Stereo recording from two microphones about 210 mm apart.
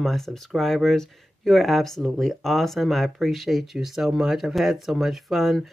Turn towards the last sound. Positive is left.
turn(degrees=0)  # may be behind; listen again after turning